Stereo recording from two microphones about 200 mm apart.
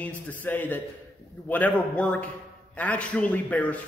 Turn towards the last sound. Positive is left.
turn(degrees=5)  # may be behind; listen again after turning